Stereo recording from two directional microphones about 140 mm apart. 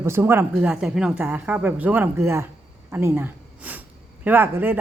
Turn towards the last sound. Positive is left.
turn(degrees=-15)  # may be behind; listen again after turning